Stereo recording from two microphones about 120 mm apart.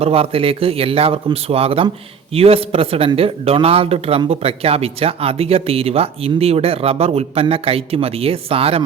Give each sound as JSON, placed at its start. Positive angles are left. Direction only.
{"t": 0.0, "sound": "speech", "side_deg": -55}